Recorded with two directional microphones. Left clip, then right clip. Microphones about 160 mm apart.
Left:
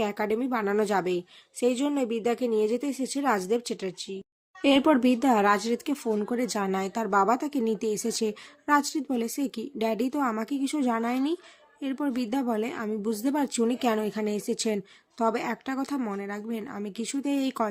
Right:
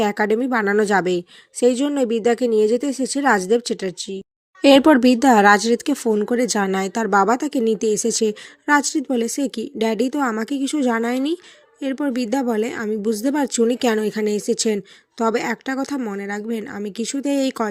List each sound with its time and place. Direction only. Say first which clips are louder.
0.0 s a woman's voice: right 9 dB; 40° right (ahead or behind); by 17.7 s 25° right (ahead or behind)